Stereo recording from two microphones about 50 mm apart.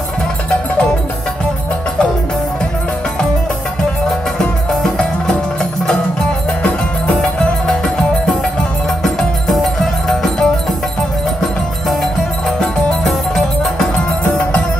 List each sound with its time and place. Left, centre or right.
4.4 s music: centre
6.6 s music: centre
9.0 s music: centre
13.9 s music: left